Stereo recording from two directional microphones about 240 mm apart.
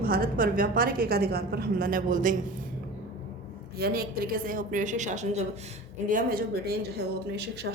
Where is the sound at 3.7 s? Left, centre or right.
Right.